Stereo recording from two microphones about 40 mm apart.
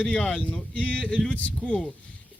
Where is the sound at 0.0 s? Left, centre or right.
Left.